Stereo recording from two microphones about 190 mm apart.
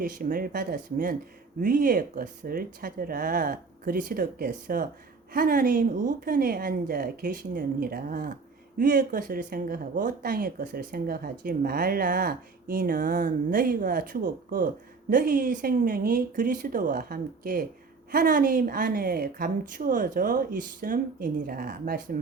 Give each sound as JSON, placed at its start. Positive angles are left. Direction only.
{"t": 0.0, "sound": "speech", "side_deg": -45}